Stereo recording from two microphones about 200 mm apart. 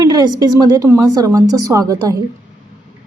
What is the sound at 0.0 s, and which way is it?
A woman's voice, 20° right (ahead or behind).